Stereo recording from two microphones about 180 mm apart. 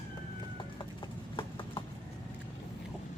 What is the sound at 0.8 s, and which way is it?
Clip-clop, 25° left (ahead or behind).